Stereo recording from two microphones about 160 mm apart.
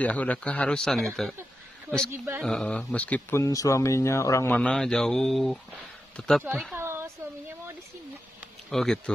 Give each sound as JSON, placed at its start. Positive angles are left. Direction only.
{"t": 0.0, "sound": "speech", "side_deg": 10}
{"t": 2.0, "sound": "speech", "side_deg": -15}
{"t": 2.4, "sound": "speech", "side_deg": 5}
{"t": 4.5, "sound": "speech", "side_deg": 5}
{"t": 6.7, "sound": "a sound", "side_deg": -15}
{"t": 8.6, "sound": "speech", "side_deg": 5}